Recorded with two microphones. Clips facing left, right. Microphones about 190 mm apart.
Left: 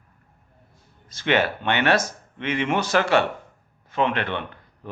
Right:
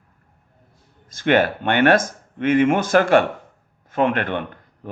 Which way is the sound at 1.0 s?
50° right (ahead or behind).